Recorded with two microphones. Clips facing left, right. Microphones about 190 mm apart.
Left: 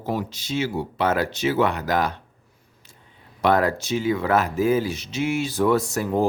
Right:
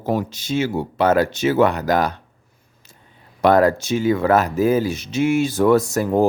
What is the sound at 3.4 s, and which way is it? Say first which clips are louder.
Speech: right 5 dB; 40° right (ahead or behind).